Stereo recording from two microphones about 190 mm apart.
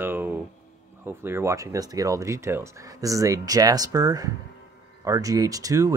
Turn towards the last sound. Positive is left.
turn(degrees=-20)  # may be behind; listen again after turning